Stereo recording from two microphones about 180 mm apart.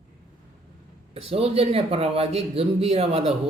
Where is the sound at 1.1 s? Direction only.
35° right (ahead or behind).